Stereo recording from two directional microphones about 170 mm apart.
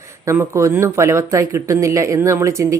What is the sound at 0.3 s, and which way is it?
Speech, 15° right (ahead or behind).